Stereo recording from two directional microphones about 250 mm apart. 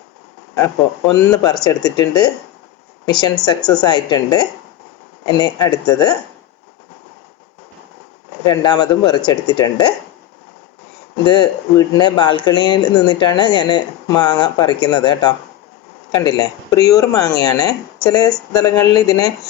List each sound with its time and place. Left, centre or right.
0.6 s speech: centre
8.4 s speech: centre
11.3 s speech: centre